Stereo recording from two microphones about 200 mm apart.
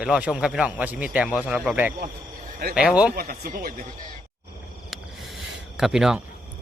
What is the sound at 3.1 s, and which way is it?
Speech, 50° right (ahead or behind).